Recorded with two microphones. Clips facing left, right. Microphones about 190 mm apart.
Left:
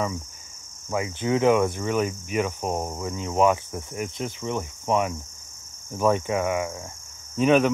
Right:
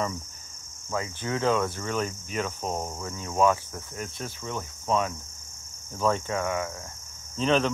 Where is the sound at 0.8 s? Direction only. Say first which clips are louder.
Left 5 dB; 15° left (ahead or behind).